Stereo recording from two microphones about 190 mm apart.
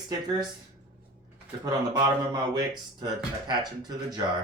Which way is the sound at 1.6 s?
25° right (ahead or behind).